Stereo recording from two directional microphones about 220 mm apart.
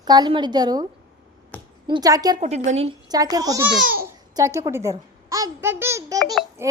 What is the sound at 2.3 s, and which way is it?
A child's voice, 30° right (ahead or behind).